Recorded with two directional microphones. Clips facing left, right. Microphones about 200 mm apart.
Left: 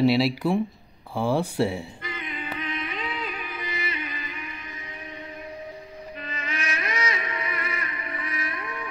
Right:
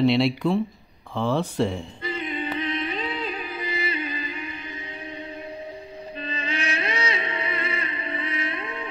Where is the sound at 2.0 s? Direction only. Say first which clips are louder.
Right 6 dB; 30° right (ahead or behind).